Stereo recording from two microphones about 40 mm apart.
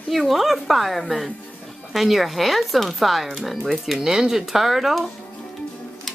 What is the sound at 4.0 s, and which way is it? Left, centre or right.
Speech, centre.